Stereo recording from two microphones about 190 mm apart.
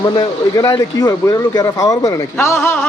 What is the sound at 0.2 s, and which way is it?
A man's voice, 15° left (ahead or behind).